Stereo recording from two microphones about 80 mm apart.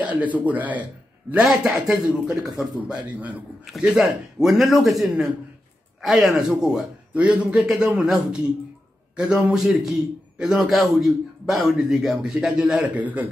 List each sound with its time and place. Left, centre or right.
0.0 s speech: centre
3.8 s a man's voice: centre
12.9 s speech: centre